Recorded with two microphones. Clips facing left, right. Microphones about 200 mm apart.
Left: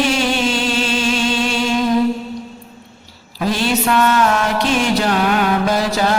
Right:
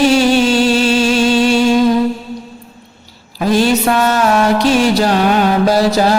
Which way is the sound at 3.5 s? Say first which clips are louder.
Right 5 dB; 40° right (ahead or behind).